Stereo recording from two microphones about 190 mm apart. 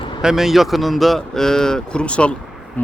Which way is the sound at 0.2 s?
Centre (ahead or behind).